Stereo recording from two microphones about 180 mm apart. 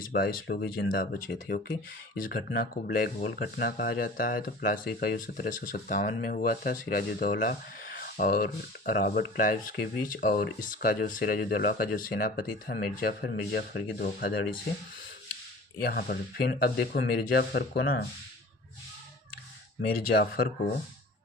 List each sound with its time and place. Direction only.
0.0 s speech: 55° left (ahead or behind)
8.0 s a sound: 50° left (ahead or behind)
8.9 s speech: 55° left (ahead or behind)
15.8 s speech: 55° left (ahead or behind)
19.9 s speech: 60° left (ahead or behind)